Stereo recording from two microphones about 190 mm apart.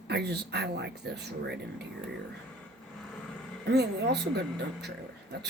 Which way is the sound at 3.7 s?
60° right (ahead or behind).